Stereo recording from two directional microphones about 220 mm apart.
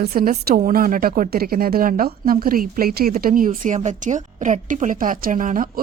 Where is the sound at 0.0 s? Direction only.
40° right (ahead or behind).